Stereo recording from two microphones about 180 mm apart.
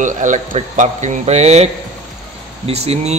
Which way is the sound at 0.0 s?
45° right (ahead or behind).